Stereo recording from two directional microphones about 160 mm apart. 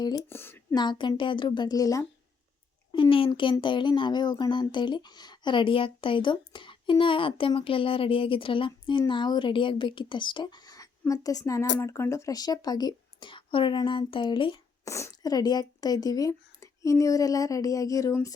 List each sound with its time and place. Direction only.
0.3 s speech: 15° left (ahead or behind)
0.7 s speech: 30° left (ahead or behind)
2.9 s speech: 35° left (ahead or behind)
14.8 s speech: 20° left (ahead or behind)